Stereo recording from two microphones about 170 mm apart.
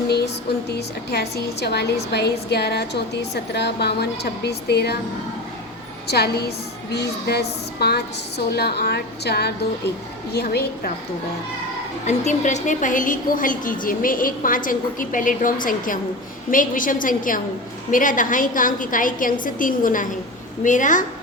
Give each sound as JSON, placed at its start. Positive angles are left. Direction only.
{"t": 0.7, "sound": "a woman's voice", "side_deg": 70}
{"t": 6.1, "sound": "a woman's voice", "side_deg": 70}
{"t": 12.0, "sound": "a woman's voice", "side_deg": 45}